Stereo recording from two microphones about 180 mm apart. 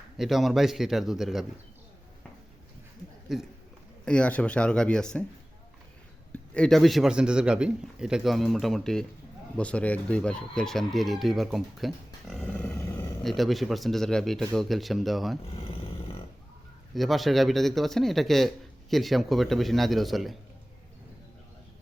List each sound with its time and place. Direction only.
0.2 s speech: centre (ahead or behind)
3.3 s speech: centre (ahead or behind)
6.3 s speech: 5° left (ahead or behind)
13.2 s speech: centre (ahead or behind)
15.6 s a sound: 30° left (ahead or behind)
16.9 s speech: centre (ahead or behind)